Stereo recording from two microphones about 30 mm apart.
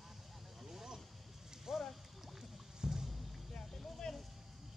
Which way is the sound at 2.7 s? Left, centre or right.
Right.